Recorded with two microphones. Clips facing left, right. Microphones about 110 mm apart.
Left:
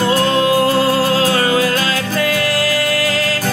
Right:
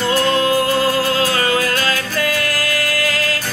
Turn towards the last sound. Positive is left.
turn(degrees=25)  # may be behind; listen again after turning